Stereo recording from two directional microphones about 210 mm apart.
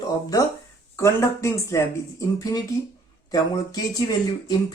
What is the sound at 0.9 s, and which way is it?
Speech, 15° left (ahead or behind).